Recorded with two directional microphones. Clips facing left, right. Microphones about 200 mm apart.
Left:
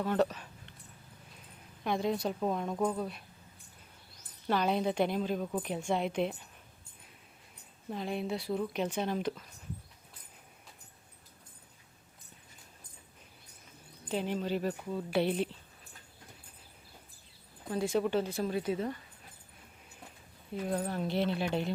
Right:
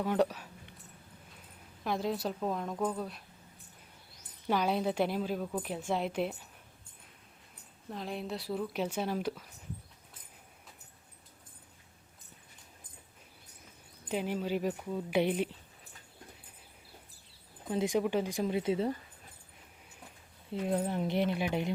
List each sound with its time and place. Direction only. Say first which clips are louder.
0.0 s speech: even; 10° right (ahead or behind)
1.8 s a woman's voice: left 2 dB; centre (ahead or behind)
4.4 s a woman's voice: even; 5° right (ahead or behind)
7.9 s a woman's voice: left 3 dB; centre (ahead or behind)
14.1 s speech: even; 10° right (ahead or behind)
17.7 s speech: even; 15° right (ahead or behind)
20.5 s speech: right 2 dB; 25° right (ahead or behind)